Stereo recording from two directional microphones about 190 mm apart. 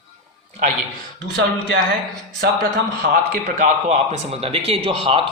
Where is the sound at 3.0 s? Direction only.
50° right (ahead or behind).